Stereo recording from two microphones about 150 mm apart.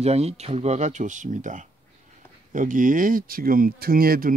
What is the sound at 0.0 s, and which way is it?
Speech, 45° right (ahead or behind).